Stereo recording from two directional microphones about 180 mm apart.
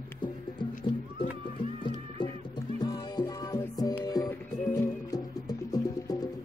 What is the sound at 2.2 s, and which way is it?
Music, 25° left (ahead or behind).